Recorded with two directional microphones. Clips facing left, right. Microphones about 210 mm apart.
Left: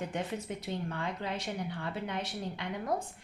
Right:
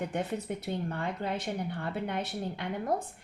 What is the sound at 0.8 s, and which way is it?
A woman's voice, 50° right (ahead or behind).